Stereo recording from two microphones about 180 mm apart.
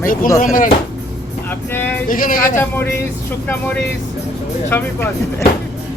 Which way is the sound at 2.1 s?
50° left (ahead or behind).